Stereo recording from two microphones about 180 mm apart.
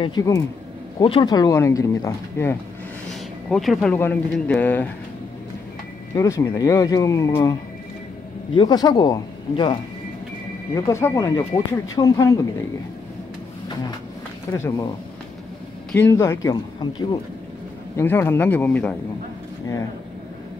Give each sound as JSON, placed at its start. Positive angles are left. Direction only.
{"t": 0.0, "sound": "speech", "side_deg": 20}
{"t": 3.4, "sound": "speech", "side_deg": 5}
{"t": 6.1, "sound": "speech", "side_deg": 15}
{"t": 8.5, "sound": "speech", "side_deg": 20}
{"t": 14.5, "sound": "speech", "side_deg": 20}
{"t": 15.9, "sound": "speech", "side_deg": 15}
{"t": 17.9, "sound": "speech", "side_deg": 10}